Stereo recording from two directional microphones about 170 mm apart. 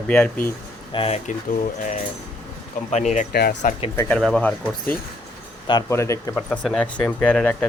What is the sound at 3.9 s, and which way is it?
Speech, 15° left (ahead or behind).